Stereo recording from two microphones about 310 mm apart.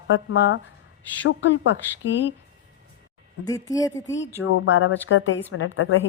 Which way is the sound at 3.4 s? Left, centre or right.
Centre.